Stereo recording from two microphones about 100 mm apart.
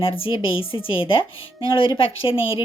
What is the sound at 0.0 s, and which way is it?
Speech, 65° left (ahead or behind).